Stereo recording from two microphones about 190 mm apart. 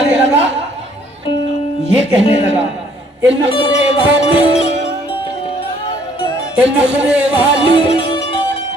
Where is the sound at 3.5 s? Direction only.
30° left (ahead or behind).